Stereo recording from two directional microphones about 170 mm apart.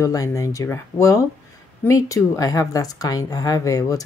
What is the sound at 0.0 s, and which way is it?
A woman's voice, 20° left (ahead or behind).